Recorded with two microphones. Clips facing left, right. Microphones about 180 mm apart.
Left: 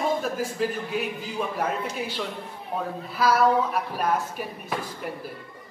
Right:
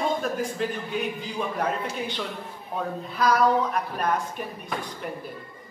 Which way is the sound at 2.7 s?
5° left (ahead or behind).